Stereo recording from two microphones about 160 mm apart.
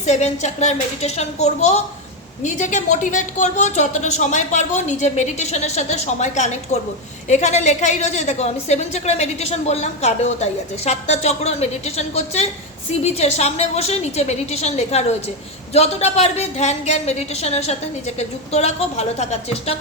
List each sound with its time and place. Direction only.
0.0 s a woman's voice: 45° left (ahead or behind)